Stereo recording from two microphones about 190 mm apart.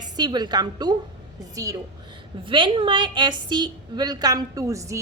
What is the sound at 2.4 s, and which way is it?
A woman's voice, 25° right (ahead or behind).